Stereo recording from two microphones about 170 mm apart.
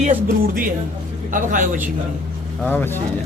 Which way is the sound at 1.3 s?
50° right (ahead or behind).